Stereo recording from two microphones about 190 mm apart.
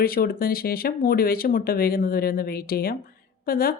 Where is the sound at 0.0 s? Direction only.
50° left (ahead or behind).